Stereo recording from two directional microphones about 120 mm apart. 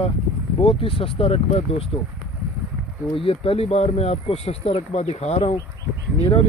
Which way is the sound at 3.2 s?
50° left (ahead or behind).